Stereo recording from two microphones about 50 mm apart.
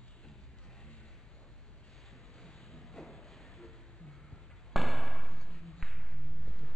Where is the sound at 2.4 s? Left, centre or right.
Centre.